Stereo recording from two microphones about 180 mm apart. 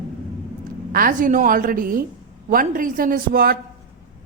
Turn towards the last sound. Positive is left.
turn(degrees=-55)  # may be behind; listen again after turning